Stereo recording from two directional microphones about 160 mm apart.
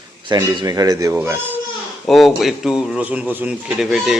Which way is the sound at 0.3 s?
25° right (ahead or behind).